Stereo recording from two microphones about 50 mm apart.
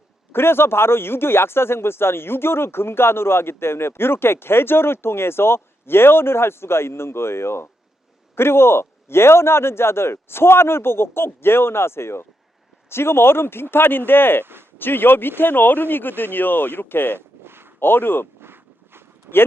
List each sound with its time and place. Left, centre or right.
0.3 s a man's voice: left
17.2 s a sound: right
17.7 s speech: left
18.3 s walk: right